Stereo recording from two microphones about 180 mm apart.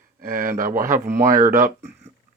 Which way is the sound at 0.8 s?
45° right (ahead or behind).